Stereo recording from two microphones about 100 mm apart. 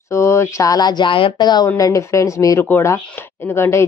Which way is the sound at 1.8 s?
30° left (ahead or behind).